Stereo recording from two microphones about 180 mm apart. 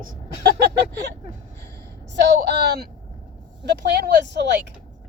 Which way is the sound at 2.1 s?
65° right (ahead or behind).